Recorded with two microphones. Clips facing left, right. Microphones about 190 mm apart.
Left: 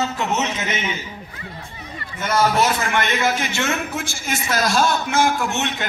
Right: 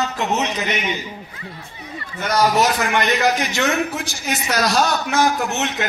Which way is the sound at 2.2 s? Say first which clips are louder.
Right 1 dB; 35° right (ahead or behind).